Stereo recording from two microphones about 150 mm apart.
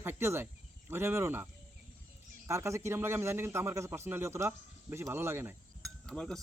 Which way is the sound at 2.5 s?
20° right (ahead or behind).